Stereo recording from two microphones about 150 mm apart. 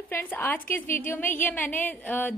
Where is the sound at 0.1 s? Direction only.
15° left (ahead or behind).